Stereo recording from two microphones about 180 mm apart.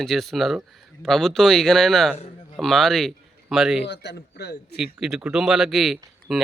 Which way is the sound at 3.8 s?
70° left (ahead or behind).